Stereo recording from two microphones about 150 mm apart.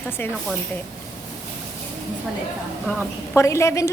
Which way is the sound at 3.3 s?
20° left (ahead or behind).